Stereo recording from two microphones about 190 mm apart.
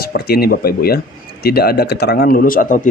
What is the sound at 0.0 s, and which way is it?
Speech, 55° left (ahead or behind).